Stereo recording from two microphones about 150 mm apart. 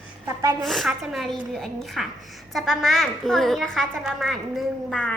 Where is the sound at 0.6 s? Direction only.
Centre (ahead or behind).